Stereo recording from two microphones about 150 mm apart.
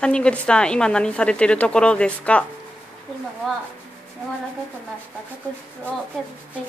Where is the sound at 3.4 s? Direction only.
5° left (ahead or behind).